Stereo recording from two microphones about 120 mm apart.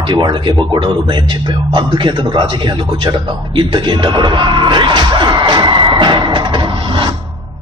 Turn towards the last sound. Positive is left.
turn(degrees=-40)  # may be behind; listen again after turning